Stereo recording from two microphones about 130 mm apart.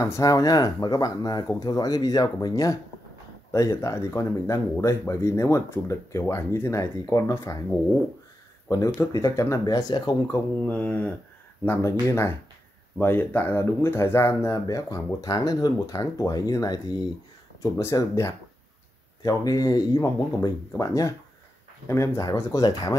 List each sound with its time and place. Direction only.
0.0 s speech: 25° left (ahead or behind)
8.6 s speech: 25° left (ahead or behind)
10.3 s speech: 15° left (ahead or behind)